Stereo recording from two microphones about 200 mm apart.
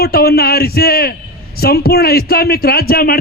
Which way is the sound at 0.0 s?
50° left (ahead or behind).